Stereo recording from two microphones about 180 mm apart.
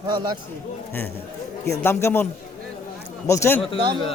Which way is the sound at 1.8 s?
10° left (ahead or behind).